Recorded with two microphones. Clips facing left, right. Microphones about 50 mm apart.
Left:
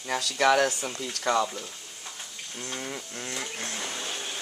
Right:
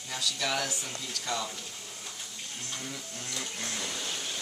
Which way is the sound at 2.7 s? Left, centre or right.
Left.